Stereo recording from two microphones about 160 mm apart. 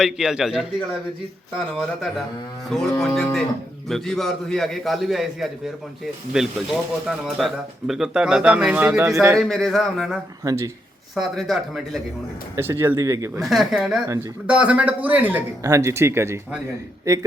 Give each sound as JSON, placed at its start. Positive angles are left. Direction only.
{"t": 0.0, "sound": "speech", "side_deg": -5}
{"t": 9.4, "sound": "speech", "side_deg": 0}
{"t": 10.4, "sound": "speech", "side_deg": -20}
{"t": 11.1, "sound": "speech", "side_deg": 0}
{"t": 12.5, "sound": "speech", "side_deg": -15}
{"t": 13.4, "sound": "speech", "side_deg": 0}